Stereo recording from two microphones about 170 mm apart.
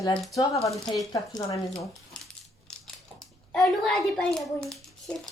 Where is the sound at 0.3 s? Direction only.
20° left (ahead or behind).